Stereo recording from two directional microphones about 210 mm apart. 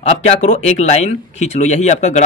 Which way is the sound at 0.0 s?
30° left (ahead or behind).